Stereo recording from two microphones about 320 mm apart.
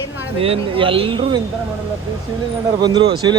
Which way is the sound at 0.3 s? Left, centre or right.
Centre.